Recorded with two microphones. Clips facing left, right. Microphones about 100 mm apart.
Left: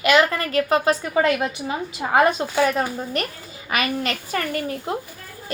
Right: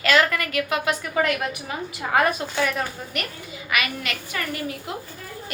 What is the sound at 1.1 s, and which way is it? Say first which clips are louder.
A woman's voice: left 3 dB; 25° left (ahead or behind).